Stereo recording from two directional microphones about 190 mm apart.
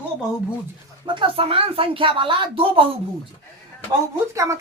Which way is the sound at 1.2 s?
30° right (ahead or behind).